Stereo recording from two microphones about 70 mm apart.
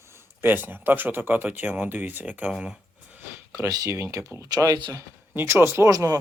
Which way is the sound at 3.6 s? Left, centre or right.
Right.